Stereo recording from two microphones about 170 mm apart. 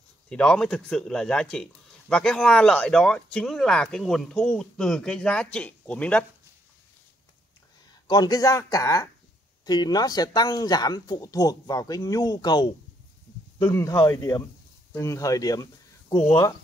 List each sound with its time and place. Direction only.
0.3 s speech: 5° left (ahead or behind)
8.1 s speech: 20° left (ahead or behind)